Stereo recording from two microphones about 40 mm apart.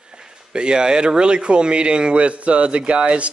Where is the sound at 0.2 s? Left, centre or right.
Right.